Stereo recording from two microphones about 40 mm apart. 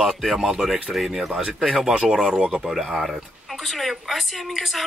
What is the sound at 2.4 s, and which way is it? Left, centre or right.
Speech, centre.